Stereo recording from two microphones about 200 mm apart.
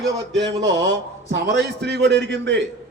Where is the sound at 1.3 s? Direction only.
55° right (ahead or behind).